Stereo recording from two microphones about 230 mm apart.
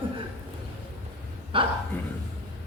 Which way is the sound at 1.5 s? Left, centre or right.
Right.